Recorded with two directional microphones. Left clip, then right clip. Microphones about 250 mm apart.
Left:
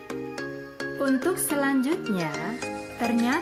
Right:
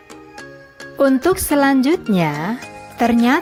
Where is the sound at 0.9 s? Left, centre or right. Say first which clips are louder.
Right 11 dB; right.